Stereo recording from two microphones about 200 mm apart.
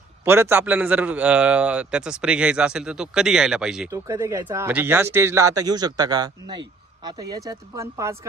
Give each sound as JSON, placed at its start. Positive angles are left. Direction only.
{"t": 0.2, "sound": "a man's voice", "side_deg": -10}
{"t": 3.9, "sound": "speech", "side_deg": -15}